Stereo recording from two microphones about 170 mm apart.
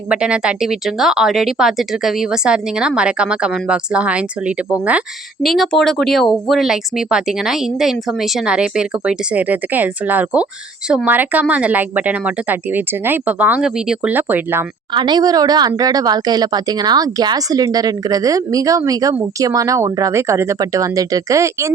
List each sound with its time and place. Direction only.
0.1 s speech: 5° right (ahead or behind)
14.9 s speech: 25° right (ahead or behind)